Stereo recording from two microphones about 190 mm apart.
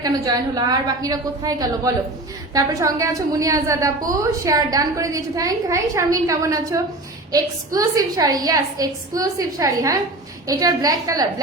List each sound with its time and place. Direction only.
0.0 s a woman's voice: 20° right (ahead or behind)